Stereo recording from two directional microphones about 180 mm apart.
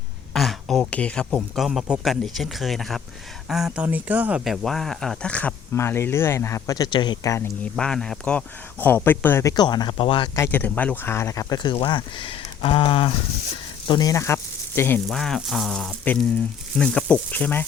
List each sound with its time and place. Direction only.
0.3 s speech: centre (ahead or behind); by 10.2 s 30° left (ahead or behind)
10.3 s speech: 10° left (ahead or behind)
15.0 s speech: centre (ahead or behind)